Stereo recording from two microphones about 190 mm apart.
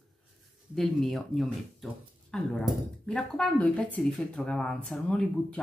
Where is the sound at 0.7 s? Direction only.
Centre (ahead or behind).